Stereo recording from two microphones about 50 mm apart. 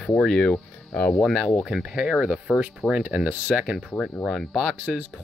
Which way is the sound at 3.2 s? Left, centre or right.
Right.